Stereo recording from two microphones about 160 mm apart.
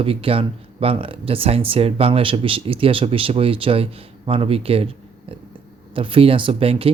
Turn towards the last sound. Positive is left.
turn(degrees=-35)  # may be behind; listen again after turning